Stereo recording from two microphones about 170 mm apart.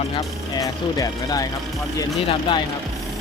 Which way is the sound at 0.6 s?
20° left (ahead or behind).